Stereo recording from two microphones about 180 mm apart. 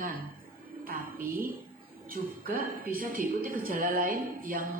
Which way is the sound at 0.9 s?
55° right (ahead or behind).